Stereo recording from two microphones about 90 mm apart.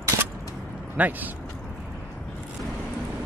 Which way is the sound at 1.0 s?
20° right (ahead or behind).